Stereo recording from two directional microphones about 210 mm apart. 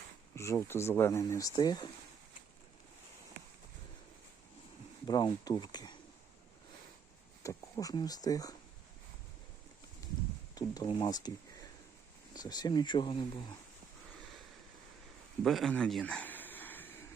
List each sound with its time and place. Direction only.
0.3 s speech: 15° left (ahead or behind)
5.0 s speech: 20° left (ahead or behind)
7.4 s speech: 15° left (ahead or behind)
10.5 s speech: 20° left (ahead or behind)
12.3 s speech: 20° left (ahead or behind)
15.4 s a sound: centre (ahead or behind)